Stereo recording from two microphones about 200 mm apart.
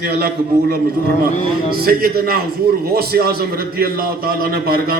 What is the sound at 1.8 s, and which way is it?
A man's voice, 50° right (ahead or behind).